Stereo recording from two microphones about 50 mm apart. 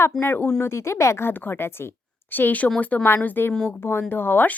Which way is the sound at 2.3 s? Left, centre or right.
Left.